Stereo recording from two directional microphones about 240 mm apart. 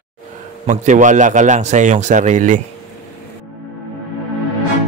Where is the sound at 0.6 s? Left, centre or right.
Right.